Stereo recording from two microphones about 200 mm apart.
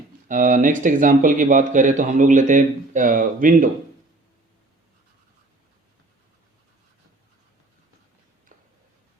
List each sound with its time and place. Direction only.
0.3 s speech: 40° right (ahead or behind)